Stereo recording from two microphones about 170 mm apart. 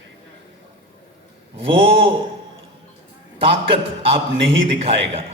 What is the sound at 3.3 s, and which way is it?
Speech, 30° right (ahead or behind).